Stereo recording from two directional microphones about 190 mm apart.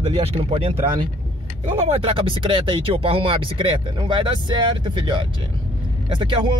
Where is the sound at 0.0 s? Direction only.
30° right (ahead or behind).